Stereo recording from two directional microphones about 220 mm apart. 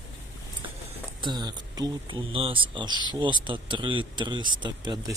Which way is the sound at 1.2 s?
20° right (ahead or behind).